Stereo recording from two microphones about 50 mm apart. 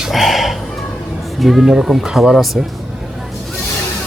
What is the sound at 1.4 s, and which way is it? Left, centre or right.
Speech, centre.